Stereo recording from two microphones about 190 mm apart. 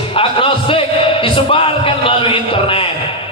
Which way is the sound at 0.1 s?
30° left (ahead or behind).